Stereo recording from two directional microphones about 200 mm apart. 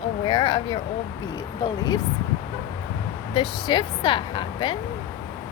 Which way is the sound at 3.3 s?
25° left (ahead or behind).